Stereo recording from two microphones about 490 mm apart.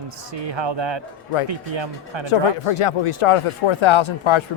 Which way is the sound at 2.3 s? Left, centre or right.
Left.